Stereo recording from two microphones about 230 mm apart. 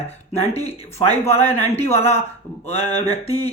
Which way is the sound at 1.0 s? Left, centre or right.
Left.